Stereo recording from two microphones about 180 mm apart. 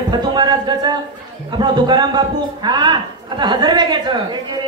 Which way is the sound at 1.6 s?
25° right (ahead or behind).